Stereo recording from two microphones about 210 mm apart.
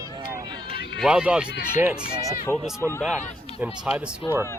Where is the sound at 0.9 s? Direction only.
5° right (ahead or behind).